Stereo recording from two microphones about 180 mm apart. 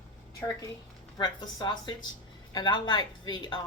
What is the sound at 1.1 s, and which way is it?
A woman's voice, 20° left (ahead or behind).